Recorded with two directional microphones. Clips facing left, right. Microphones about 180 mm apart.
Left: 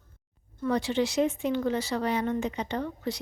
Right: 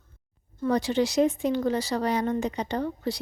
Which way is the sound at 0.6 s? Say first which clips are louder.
Right 2 dB; 40° right (ahead or behind).